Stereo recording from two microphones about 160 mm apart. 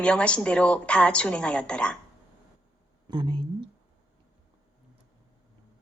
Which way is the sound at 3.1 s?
30° right (ahead or behind).